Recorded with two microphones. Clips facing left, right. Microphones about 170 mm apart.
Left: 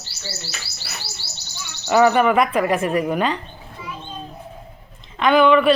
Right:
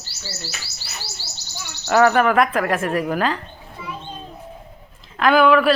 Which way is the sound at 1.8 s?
Centre (ahead or behind).